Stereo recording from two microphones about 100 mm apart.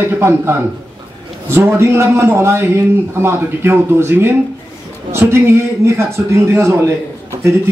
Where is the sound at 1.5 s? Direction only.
25° right (ahead or behind).